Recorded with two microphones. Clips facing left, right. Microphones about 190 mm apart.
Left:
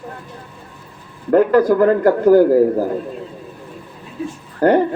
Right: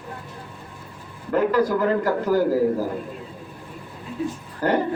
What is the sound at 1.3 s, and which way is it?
Speech, 55° left (ahead or behind).